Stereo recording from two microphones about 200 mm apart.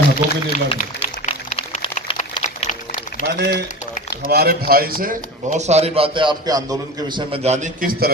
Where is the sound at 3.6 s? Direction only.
40° left (ahead or behind).